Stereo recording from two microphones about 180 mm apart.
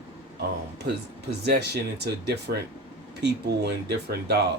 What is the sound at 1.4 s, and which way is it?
Speech, 65° right (ahead or behind).